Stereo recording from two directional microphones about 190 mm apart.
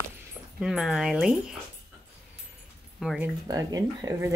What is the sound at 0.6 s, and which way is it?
Speech, 5° right (ahead or behind).